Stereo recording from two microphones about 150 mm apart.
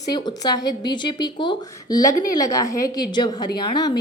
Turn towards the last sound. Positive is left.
turn(degrees=30)  # may be behind; listen again after turning